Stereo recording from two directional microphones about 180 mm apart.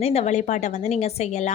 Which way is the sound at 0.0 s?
35° left (ahead or behind).